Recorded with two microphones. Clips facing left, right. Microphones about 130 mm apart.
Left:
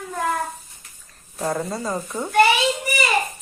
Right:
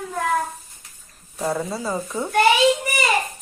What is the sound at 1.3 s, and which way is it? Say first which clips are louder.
Speech: even; centre (ahead or behind).